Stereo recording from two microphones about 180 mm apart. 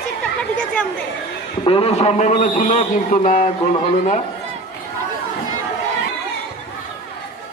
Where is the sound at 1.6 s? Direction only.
30° left (ahead or behind).